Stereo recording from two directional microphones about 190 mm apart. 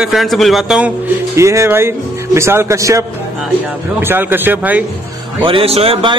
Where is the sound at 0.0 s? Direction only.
Centre (ahead or behind).